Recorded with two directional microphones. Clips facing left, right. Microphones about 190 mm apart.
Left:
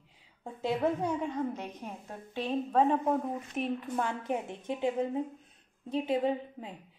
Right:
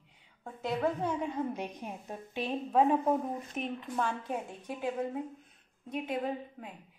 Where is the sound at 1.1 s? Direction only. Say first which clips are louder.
Left 1 dB; 5° right (ahead or behind).